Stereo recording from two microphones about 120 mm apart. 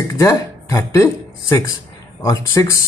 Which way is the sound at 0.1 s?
25° left (ahead or behind).